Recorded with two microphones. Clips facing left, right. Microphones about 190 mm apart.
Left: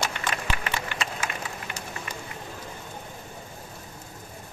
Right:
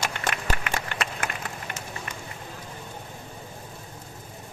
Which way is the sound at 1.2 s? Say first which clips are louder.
Right 1 dB; 55° right (ahead or behind).